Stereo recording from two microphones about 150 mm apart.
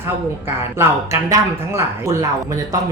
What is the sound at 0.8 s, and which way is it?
Speech, 20° right (ahead or behind).